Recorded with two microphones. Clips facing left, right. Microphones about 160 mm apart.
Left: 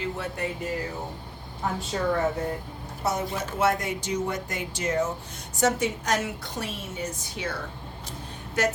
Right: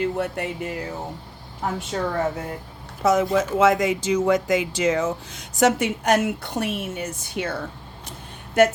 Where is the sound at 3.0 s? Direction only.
90° right.